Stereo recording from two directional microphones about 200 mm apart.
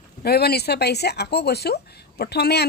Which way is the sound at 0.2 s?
50° left (ahead or behind).